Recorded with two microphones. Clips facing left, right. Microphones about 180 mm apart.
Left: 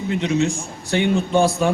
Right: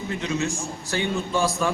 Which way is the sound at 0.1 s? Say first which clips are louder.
Left 7 dB; 20° left (ahead or behind).